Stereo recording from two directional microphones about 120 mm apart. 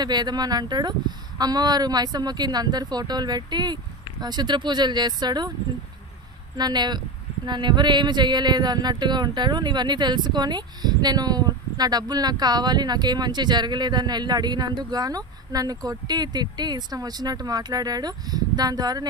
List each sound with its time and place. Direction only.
0.0 s speech: 35° right (ahead or behind)
6.5 s speech: 35° right (ahead or behind)